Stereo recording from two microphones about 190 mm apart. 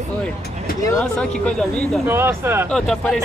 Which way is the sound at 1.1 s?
5° left (ahead or behind).